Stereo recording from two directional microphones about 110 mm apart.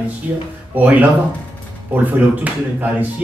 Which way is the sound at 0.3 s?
10° right (ahead or behind).